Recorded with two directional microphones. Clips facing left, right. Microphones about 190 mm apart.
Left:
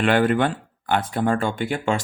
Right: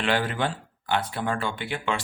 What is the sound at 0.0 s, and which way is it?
Speech, 55° left (ahead or behind).